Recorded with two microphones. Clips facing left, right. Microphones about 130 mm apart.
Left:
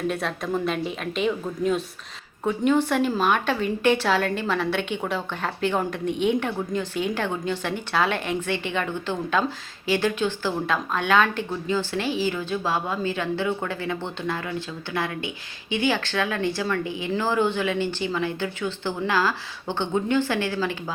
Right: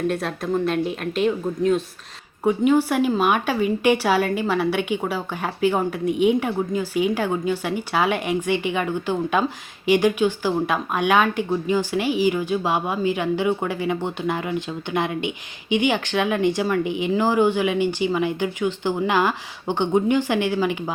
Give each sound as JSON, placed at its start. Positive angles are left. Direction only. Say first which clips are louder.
{"t": 0.1, "sound": "a woman's voice", "louder": "right 3 dB", "side_deg": 0}
{"t": 2.4, "sound": "speech", "louder": "right 3 dB", "side_deg": -10}